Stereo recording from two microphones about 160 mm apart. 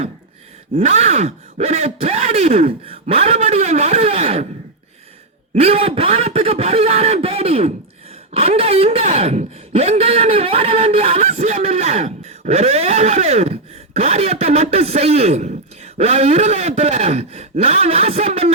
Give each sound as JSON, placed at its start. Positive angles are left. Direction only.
{"t": 0.8, "sound": "speech", "side_deg": -45}
{"t": 5.5, "sound": "speech", "side_deg": -40}